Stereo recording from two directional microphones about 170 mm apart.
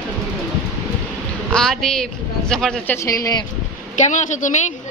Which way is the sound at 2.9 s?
20° left (ahead or behind).